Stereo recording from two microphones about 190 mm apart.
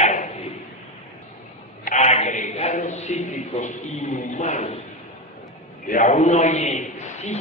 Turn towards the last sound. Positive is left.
turn(degrees=35)  # may be behind; listen again after turning